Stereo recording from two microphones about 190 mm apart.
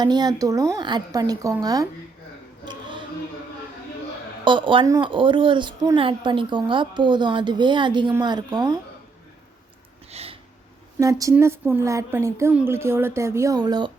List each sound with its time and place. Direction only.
0.0 s a woman's voice: 20° right (ahead or behind)
4.4 s a woman's voice: 25° right (ahead or behind)
10.1 s a sound: 35° right (ahead or behind)
11.0 s speech: 15° right (ahead or behind)